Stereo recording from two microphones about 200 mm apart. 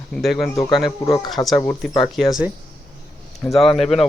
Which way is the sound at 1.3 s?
Centre (ahead or behind).